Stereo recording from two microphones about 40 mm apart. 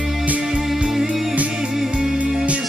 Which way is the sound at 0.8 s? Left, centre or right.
Centre.